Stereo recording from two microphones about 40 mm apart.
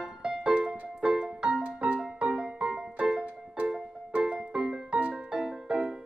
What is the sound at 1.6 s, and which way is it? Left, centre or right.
Music, right.